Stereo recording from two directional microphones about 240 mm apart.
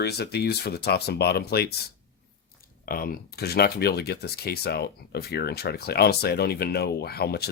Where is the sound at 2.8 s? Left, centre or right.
Left.